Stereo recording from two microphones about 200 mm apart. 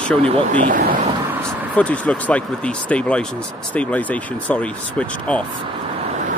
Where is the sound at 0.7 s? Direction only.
45° right (ahead or behind).